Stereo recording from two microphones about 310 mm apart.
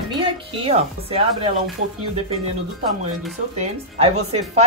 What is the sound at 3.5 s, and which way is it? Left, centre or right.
A woman's voice, centre.